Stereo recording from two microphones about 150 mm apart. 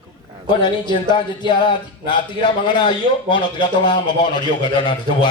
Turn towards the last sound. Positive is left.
turn(degrees=35)  # may be behind; listen again after turning